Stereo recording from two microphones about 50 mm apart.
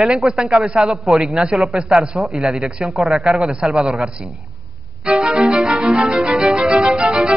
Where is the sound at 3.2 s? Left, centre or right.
Centre.